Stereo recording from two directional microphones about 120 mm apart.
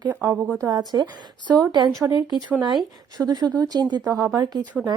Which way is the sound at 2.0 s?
35° right (ahead or behind).